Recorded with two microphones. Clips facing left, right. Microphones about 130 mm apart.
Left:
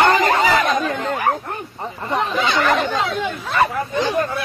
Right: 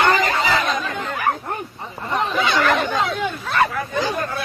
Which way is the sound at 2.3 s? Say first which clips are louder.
Even; 10° left (ahead or behind).